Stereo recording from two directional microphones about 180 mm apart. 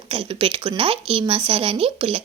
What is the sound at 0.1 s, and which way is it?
Speech, 30° right (ahead or behind).